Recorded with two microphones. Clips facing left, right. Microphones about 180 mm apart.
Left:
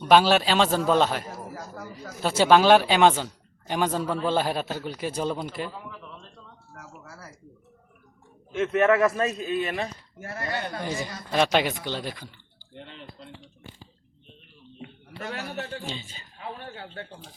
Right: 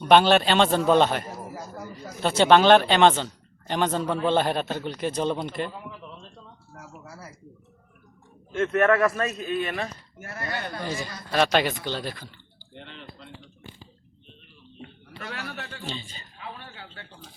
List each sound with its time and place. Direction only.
0.0 s a man's voice: 5° left (ahead or behind)
1.5 s a sound: 10° right (ahead or behind)
2.2 s a man's voice: 5° left (ahead or behind)
8.7 s a man's voice: 15° left (ahead or behind)
15.8 s a man's voice: 10° left (ahead or behind)
16.7 s speech: 45° left (ahead or behind)